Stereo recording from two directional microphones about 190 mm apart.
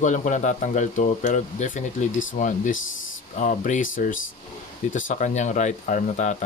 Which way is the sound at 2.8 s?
90° left.